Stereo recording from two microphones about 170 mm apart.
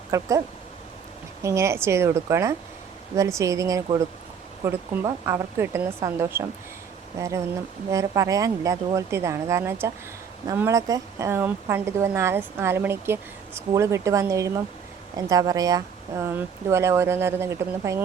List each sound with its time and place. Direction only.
0.1 s speech: 20° right (ahead or behind)